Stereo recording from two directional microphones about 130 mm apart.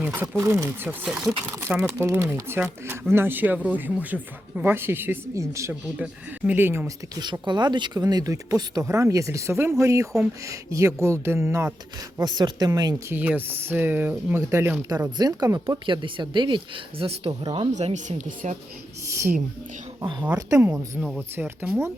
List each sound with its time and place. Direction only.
0.0 s speech: 15° right (ahead or behind)
6.0 s speech: 10° right (ahead or behind)
7.2 s speech: 35° right (ahead or behind)
12.1 s speech: 30° right (ahead or behind)
13.1 s speech: 15° right (ahead or behind); by 18.5 s 60° right (ahead or behind)
19.0 s speech: 20° right (ahead or behind)
20.0 s speech: 30° right (ahead or behind)
20.3 s speech: 20° right (ahead or behind)